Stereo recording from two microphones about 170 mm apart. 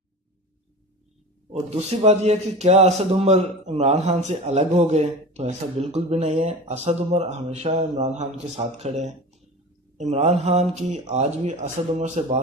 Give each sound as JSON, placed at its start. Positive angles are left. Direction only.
{"t": 1.7, "sound": "a man's voice", "side_deg": -40}